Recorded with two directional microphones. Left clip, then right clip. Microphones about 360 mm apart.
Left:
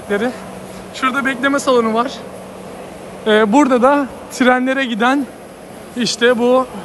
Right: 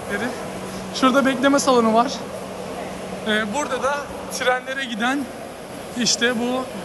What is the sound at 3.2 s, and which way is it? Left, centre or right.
A man's voice, centre.